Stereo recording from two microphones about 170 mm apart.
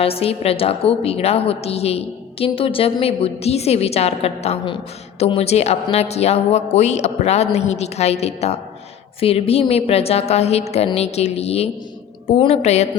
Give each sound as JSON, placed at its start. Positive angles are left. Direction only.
{"t": 0.0, "sound": "a woman's voice", "side_deg": 35}